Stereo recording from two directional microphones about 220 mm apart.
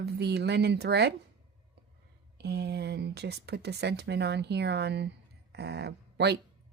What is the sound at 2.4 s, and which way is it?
A woman's voice, 50° right (ahead or behind).